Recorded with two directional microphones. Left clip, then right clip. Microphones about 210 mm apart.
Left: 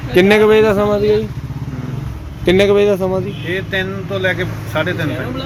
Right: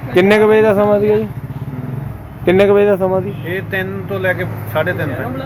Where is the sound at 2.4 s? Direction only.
5° left (ahead or behind).